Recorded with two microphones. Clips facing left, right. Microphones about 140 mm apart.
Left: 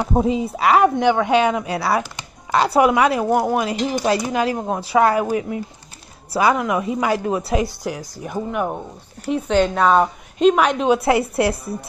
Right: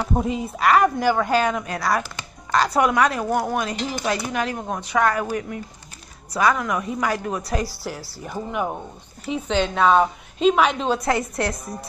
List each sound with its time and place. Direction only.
0.1 s speech: 30° left (ahead or behind)
0.6 s a woman's voice: centre (ahead or behind)
1.7 s speech: 30° left (ahead or behind)
7.8 s a woman's voice: 5° right (ahead or behind); by 11.5 s 10° left (ahead or behind)